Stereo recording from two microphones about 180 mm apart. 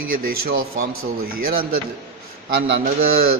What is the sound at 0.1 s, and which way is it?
Speech, 50° right (ahead or behind).